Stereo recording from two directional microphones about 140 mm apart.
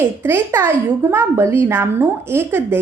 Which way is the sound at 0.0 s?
15° right (ahead or behind).